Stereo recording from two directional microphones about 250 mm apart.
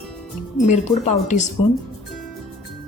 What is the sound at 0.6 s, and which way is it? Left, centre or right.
Speech, left.